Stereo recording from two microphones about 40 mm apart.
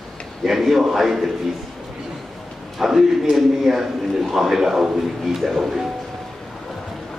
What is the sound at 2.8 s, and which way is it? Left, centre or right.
A man's voice, centre.